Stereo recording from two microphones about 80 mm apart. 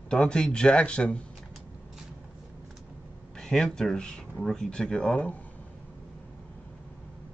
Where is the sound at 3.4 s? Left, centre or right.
Centre.